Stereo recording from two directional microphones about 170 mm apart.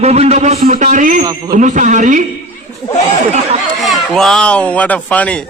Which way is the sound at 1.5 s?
45° right (ahead or behind).